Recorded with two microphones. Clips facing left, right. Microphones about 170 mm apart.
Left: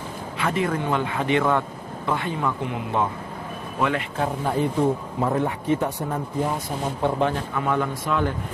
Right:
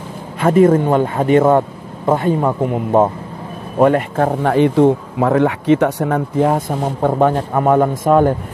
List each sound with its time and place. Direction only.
0.4 s a man's voice: 45° right (ahead or behind)